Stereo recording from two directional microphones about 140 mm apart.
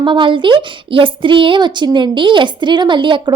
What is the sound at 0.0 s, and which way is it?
A woman's voice, 35° right (ahead or behind).